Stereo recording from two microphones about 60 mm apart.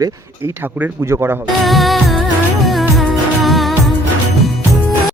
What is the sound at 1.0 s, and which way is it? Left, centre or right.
Speech, right.